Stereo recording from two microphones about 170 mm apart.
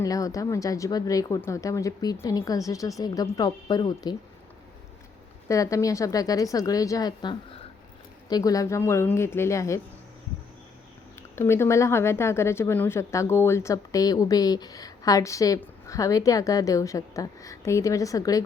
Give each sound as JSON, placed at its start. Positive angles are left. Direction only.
{"t": 0.0, "sound": "speech", "side_deg": 20}
{"t": 5.5, "sound": "speech", "side_deg": 20}
{"t": 11.3, "sound": "speech", "side_deg": 15}